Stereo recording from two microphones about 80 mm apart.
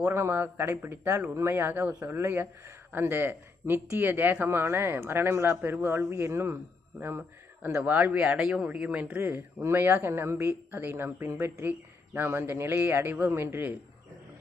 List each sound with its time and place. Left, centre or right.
0.1 s speech: right